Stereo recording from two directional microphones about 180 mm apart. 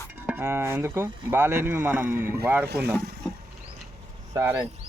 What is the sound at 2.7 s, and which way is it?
Speech, 65° right (ahead or behind).